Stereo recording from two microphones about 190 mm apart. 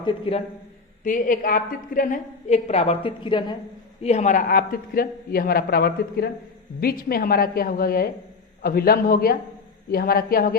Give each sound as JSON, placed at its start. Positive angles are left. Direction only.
{"t": 0.0, "sound": "a man's voice", "side_deg": 30}
{"t": 1.0, "sound": "a woman's voice", "side_deg": 45}
{"t": 4.0, "sound": "a woman's voice", "side_deg": 35}